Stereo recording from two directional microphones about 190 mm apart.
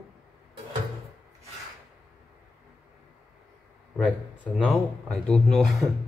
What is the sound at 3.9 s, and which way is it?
Speech, centre (ahead or behind).